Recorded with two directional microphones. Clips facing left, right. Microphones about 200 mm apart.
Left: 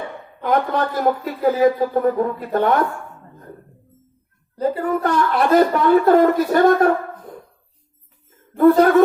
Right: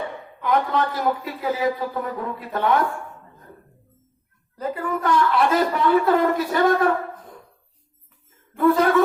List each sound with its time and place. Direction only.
0.4 s speech: 45° left (ahead or behind)
4.5 s speech: 35° left (ahead or behind)
8.5 s speech: 50° left (ahead or behind)